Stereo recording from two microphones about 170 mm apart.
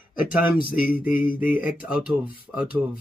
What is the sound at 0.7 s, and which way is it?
Speech, 5° right (ahead or behind).